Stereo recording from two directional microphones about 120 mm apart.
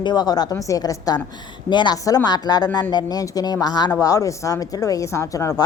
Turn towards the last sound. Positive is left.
turn(degrees=30)  # may be behind; listen again after turning